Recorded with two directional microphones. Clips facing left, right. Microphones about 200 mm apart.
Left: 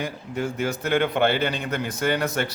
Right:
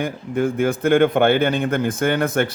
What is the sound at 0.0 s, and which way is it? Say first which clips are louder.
A man's voice: right 7 dB; 55° right (ahead or behind).